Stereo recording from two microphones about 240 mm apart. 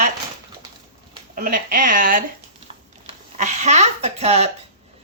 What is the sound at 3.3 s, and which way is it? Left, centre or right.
Speech, right.